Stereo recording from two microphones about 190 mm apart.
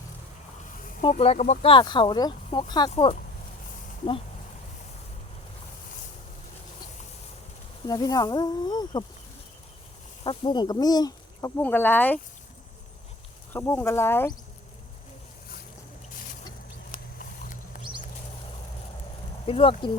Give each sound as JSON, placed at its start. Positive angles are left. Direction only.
{"t": 1.1, "sound": "speech", "side_deg": 35}
{"t": 1.7, "sound": "speech", "side_deg": 25}
{"t": 7.9, "sound": "speech", "side_deg": 20}
{"t": 10.2, "sound": "speech", "side_deg": 25}
{"t": 13.5, "sound": "speech", "side_deg": 10}
{"t": 17.2, "sound": "a sound", "side_deg": 45}
{"t": 19.5, "sound": "speech", "side_deg": 30}